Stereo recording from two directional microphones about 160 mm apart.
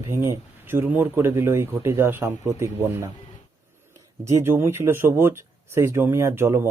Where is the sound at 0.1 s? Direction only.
15° right (ahead or behind).